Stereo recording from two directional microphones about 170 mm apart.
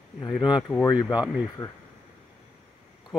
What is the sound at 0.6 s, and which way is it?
Speech, 20° left (ahead or behind).